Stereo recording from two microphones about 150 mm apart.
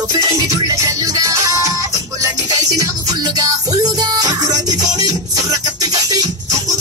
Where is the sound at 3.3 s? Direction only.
25° right (ahead or behind).